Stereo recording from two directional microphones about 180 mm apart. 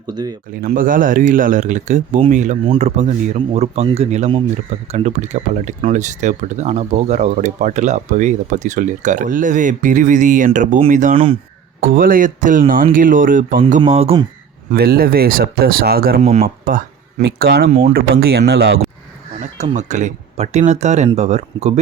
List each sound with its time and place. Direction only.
0.1 s speech: 20° right (ahead or behind)
0.6 s speech: 50° right (ahead or behind)
11.1 s speech: 30° right (ahead or behind)
11.9 s speech: 50° right (ahead or behind); by 14.3 s 35° right (ahead or behind)
14.7 s speech: 55° right (ahead or behind)
16.2 s speech: 40° right (ahead or behind)
16.6 s speech: 55° right (ahead or behind)
17.7 s speech: 40° right (ahead or behind)
17.9 s speech: 60° right (ahead or behind)
19.4 s speech: 40° right (ahead or behind)